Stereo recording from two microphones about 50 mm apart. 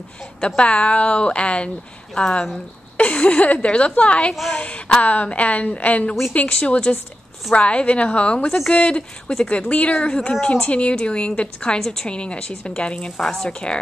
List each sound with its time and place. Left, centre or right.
0.6 s a woman's voice: left